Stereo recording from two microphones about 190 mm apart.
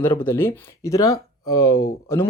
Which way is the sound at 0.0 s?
10° left (ahead or behind).